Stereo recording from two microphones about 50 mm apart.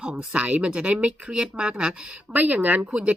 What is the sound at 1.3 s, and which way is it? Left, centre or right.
Speech, centre.